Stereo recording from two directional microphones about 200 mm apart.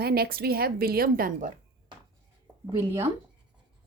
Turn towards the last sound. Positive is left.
turn(degrees=-15)  # may be behind; listen again after turning